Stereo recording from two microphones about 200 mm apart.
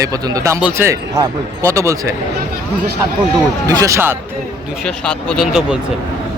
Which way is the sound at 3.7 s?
15° right (ahead or behind).